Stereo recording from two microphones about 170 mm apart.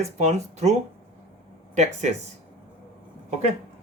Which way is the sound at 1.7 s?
40° right (ahead or behind).